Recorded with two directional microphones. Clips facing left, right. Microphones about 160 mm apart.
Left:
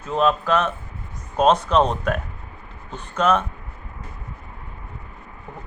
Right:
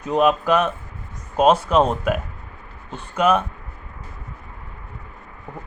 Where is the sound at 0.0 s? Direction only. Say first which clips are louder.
Right 2 dB; 15° right (ahead or behind).